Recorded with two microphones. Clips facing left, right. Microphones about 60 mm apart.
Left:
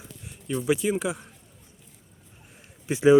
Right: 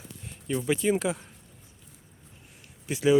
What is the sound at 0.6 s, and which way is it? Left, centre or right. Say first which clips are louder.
Speech: left 1 dB; centre.